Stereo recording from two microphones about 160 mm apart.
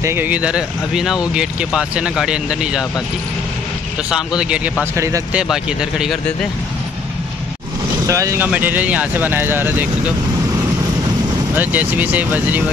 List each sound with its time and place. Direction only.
0.0 s speech: 15° right (ahead or behind)
4.1 s speech: 5° right (ahead or behind)
4.9 s speech: 20° right (ahead or behind)
5.3 s speech: 5° right (ahead or behind)
8.1 s speech: 20° right (ahead or behind)
11.5 s speech: 10° right (ahead or behind)